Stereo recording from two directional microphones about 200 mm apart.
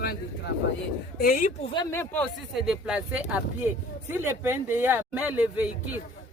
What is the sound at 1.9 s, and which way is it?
Speech, 10° left (ahead or behind).